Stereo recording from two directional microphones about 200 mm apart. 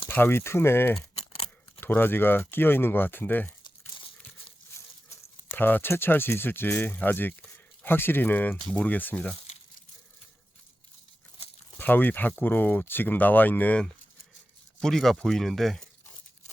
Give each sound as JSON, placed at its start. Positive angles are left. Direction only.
{"t": 0.1, "sound": "speech", "side_deg": 10}
{"t": 0.9, "sound": "keys jangling", "side_deg": 30}
{"t": 1.8, "sound": "speech", "side_deg": 10}
{"t": 3.6, "sound": "crumpling", "side_deg": 25}
{"t": 4.7, "sound": "speech", "side_deg": 10}
{"t": 11.8, "sound": "speech", "side_deg": 10}